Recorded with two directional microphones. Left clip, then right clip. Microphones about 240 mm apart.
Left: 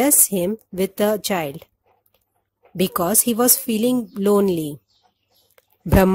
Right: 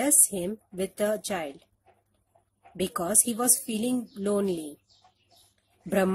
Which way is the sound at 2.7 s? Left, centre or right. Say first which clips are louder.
Left 8 dB; left.